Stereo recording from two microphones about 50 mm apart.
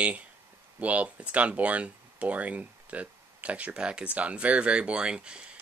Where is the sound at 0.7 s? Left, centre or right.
Right.